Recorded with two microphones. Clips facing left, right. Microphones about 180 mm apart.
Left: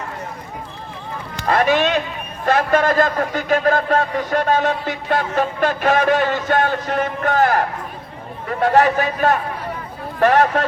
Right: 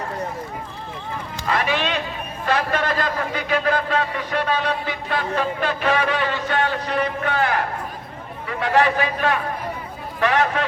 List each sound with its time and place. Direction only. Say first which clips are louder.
1.5 s a man's voice: left 6 dB; 45° left (ahead or behind)